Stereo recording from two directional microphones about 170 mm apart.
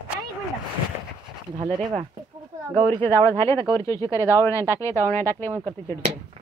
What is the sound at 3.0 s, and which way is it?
Speech, 15° left (ahead or behind).